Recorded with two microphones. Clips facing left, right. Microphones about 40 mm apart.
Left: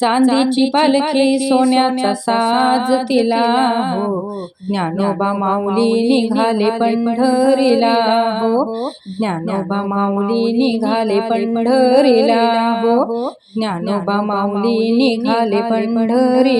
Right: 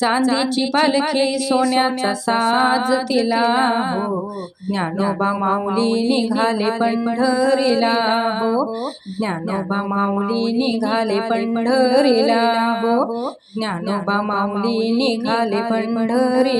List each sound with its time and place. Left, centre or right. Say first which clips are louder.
0.0 s mantra: left 4 dB; left
5.7 s mantra: left 4 dB; left
10.0 s music: left 3 dB; centre
10.3 s mantra: left 4 dB; centre
13.9 s speech: left 2 dB; centre
14.6 s mantra: left 7 dB; left